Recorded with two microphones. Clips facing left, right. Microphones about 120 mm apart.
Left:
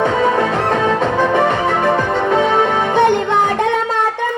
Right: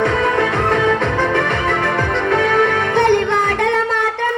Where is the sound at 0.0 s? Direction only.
15° left (ahead or behind).